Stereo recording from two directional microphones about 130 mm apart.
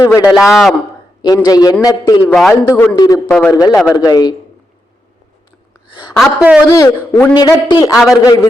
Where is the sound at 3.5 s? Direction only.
25° left (ahead or behind).